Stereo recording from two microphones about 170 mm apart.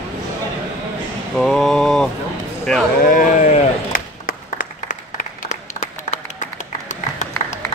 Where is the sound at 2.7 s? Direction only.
5° left (ahead or behind).